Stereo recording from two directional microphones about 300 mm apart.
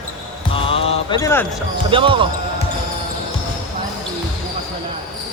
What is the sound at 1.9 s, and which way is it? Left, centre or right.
Speech, centre.